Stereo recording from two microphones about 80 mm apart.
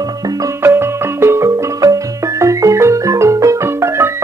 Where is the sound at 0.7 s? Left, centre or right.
Right.